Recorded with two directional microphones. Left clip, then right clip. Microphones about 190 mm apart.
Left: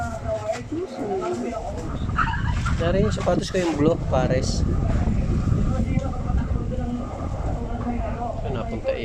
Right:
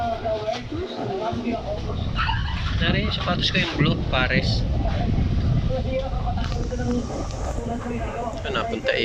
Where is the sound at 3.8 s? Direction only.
35° left (ahead or behind).